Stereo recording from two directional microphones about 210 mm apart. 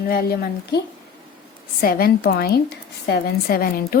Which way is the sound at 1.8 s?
45° left (ahead or behind).